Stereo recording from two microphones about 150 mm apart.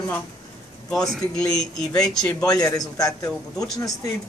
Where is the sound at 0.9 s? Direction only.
5° left (ahead or behind).